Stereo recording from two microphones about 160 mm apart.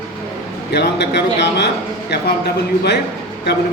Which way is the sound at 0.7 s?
90° left.